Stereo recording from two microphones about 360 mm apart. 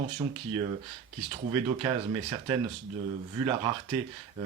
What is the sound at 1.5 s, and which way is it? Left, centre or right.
Speech, centre.